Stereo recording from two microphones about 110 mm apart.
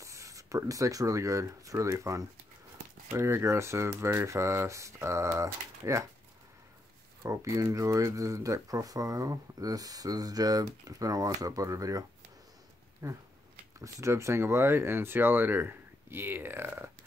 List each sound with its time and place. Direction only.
0.0 s speech: 30° right (ahead or behind)
7.2 s speech: 30° right (ahead or behind)
13.0 s speech: 30° right (ahead or behind)